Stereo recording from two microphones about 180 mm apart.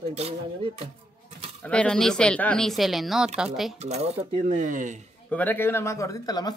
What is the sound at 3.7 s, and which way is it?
Speech, 40° right (ahead or behind).